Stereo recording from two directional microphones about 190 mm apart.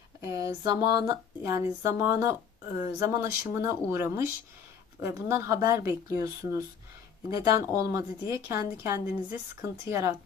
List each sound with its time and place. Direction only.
0.3 s speech: 15° right (ahead or behind)